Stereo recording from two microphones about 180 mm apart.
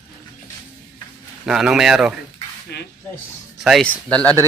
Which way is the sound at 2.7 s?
70° left (ahead or behind).